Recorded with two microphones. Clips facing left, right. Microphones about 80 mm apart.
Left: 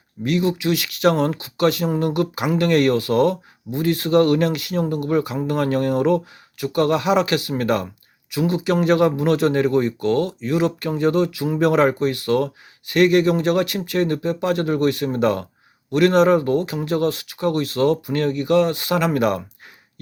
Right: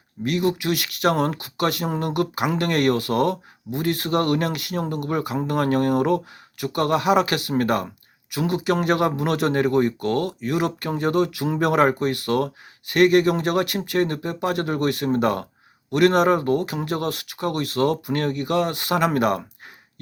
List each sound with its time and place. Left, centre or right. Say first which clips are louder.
0.3 s speech: left 2 dB; right